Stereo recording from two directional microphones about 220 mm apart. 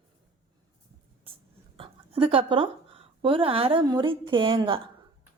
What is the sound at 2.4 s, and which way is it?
A woman's voice, 20° right (ahead or behind).